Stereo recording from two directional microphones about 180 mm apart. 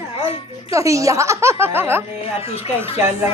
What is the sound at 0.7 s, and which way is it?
A woman's voice, 15° right (ahead or behind).